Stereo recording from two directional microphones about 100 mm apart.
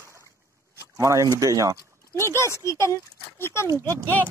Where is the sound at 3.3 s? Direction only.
25° left (ahead or behind).